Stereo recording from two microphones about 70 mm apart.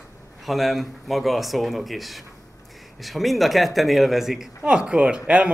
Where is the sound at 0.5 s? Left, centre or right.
Centre.